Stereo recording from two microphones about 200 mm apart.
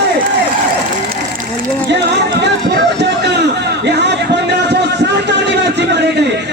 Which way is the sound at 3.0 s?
60° right (ahead or behind).